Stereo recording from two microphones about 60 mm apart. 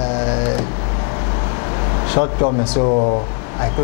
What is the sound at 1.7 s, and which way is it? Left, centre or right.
Vehicle, left.